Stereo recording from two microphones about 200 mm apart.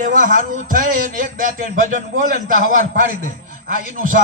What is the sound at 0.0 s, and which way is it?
A man's voice, 40° right (ahead or behind).